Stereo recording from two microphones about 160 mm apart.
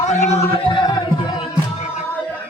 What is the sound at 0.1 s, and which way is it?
Speech, 45° left (ahead or behind).